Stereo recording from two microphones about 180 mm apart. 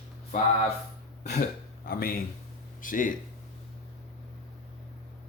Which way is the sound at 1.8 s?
55° left (ahead or behind).